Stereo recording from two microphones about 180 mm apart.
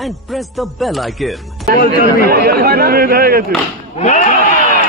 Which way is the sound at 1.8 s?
55° left (ahead or behind).